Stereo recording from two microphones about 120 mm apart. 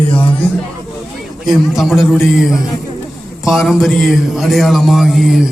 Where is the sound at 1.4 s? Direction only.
Centre (ahead or behind).